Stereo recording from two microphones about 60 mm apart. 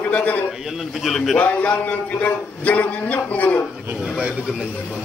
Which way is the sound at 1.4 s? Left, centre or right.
Left.